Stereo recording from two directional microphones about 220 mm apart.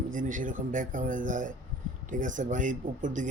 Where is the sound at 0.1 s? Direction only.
35° right (ahead or behind).